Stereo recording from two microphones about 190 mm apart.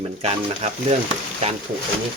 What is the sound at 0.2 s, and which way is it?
Speech, 35° right (ahead or behind).